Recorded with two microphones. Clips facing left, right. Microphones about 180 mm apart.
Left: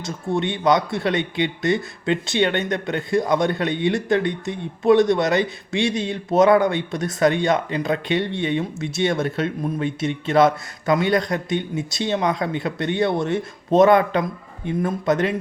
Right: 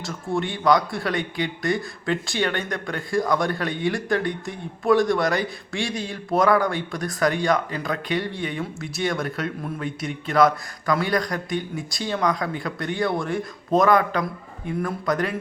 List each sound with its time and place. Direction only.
0.0 s speech: 20° left (ahead or behind)